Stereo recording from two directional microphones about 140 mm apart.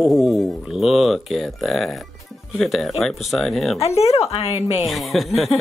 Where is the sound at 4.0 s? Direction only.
45° left (ahead or behind).